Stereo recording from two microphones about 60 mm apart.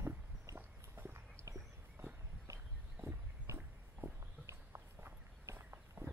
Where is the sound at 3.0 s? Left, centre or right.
Right.